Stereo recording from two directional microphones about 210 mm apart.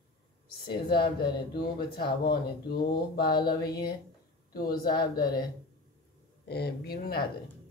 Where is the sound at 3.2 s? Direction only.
20° left (ahead or behind).